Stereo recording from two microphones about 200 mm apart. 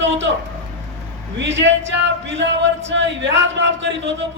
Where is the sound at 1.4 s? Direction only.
65° right (ahead or behind).